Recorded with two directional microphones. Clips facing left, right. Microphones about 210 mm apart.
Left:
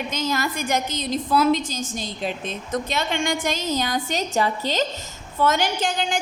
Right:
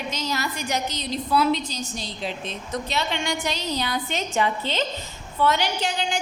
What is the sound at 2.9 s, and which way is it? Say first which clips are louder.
A woman's voice: left 1 dB; 50° left (ahead or behind).